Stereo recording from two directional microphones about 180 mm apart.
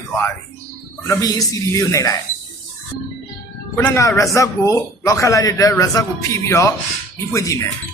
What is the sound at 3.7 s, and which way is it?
A man's voice, 15° left (ahead or behind).